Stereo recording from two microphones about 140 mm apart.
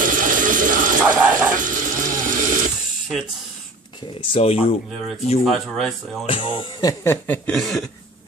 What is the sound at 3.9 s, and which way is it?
Speech, 35° left (ahead or behind).